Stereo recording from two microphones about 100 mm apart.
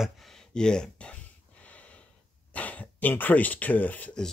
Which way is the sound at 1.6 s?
15° left (ahead or behind).